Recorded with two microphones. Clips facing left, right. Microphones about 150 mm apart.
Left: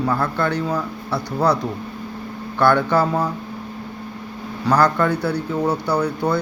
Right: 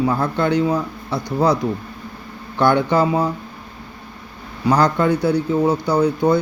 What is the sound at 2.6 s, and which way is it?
Speech, 15° right (ahead or behind).